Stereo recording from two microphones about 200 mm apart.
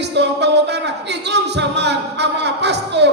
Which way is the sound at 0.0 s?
60° right (ahead or behind).